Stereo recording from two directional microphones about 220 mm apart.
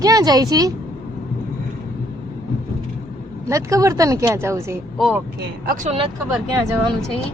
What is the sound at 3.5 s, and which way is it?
Speech, 15° right (ahead or behind).